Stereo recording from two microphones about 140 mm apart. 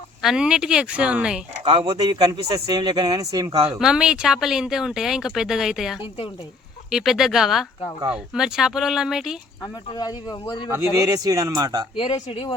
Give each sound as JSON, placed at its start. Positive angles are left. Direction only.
{"t": 0.2, "sound": "speech", "side_deg": -5}
{"t": 1.6, "sound": "speech", "side_deg": -35}
{"t": 3.8, "sound": "speech", "side_deg": -5}
{"t": 9.9, "sound": "speech", "side_deg": 30}
{"t": 10.7, "sound": "speech", "side_deg": -25}
{"t": 11.9, "sound": "speech", "side_deg": 40}